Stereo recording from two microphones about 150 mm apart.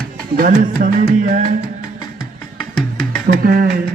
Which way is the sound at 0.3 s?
65° right (ahead or behind).